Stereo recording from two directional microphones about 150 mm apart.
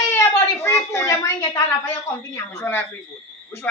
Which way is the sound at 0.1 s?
15° left (ahead or behind).